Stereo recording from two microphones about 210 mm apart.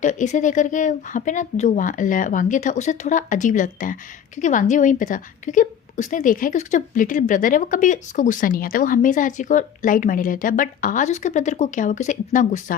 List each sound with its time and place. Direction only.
0.0 s a woman's voice: 35° left (ahead or behind)